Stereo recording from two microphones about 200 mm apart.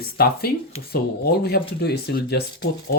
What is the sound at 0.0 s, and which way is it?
Speech, 50° left (ahead or behind).